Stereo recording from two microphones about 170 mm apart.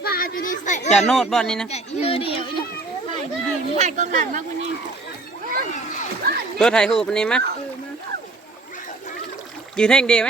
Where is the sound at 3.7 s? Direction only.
45° right (ahead or behind).